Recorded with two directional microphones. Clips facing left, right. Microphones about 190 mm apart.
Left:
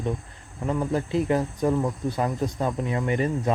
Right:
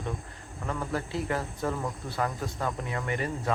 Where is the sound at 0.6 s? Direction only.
20° left (ahead or behind).